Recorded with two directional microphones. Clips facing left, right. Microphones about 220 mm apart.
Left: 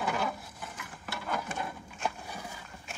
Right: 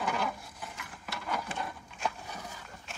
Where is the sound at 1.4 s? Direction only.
5° left (ahead or behind).